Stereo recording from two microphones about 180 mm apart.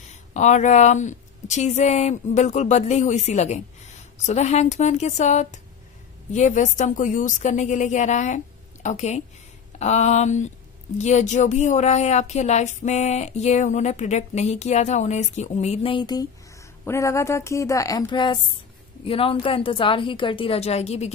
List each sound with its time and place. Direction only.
0.1 s a woman's voice: 40° left (ahead or behind)